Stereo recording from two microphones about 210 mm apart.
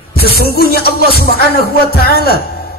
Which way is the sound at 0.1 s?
45° left (ahead or behind).